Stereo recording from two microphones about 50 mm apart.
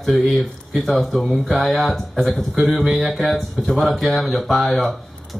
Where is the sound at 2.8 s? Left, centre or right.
Centre.